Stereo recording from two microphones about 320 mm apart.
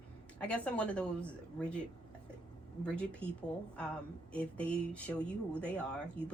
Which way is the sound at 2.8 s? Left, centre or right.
Centre.